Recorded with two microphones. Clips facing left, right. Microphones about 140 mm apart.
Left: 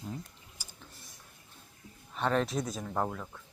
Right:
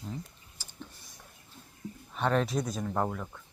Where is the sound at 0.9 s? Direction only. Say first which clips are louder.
Left 1 dB; centre (ahead or behind).